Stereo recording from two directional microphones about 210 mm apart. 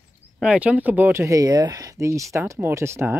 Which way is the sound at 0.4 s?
5° right (ahead or behind).